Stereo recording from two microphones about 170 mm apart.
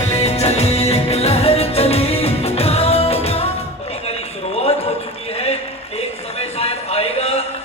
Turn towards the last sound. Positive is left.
turn(degrees=35)  # may be behind; listen again after turning